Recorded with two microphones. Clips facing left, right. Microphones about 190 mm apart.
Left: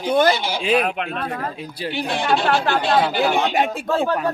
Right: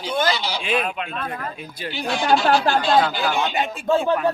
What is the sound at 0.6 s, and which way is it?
Speech, 35° left (ahead or behind).